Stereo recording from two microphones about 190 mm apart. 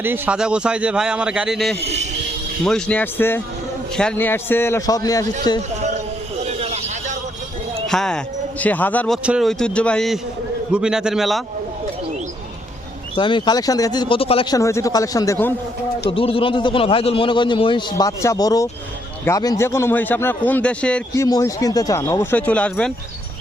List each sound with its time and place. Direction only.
0.0 s speech: 10° right (ahead or behind)
1.8 s a man's voice: 35° right (ahead or behind)
2.6 s a man's voice: 5° left (ahead or behind)
6.4 s a sound: 35° right (ahead or behind)
7.9 s speech: 5° left (ahead or behind)
13.1 s a man's voice: 25° left (ahead or behind)
14.6 s a man's voice: 15° left (ahead or behind)
16.0 s a man's voice: 30° left (ahead or behind); by 21.2 s 5° left (ahead or behind)
21.2 s a man's voice: 20° left (ahead or behind)